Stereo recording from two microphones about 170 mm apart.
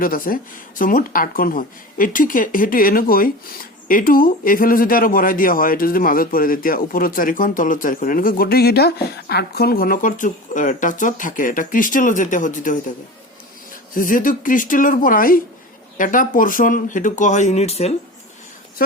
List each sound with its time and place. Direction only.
0.0 s speech: 55° left (ahead or behind)
13.9 s speech: 50° left (ahead or behind)